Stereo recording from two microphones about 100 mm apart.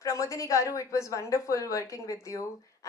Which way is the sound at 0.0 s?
30° left (ahead or behind).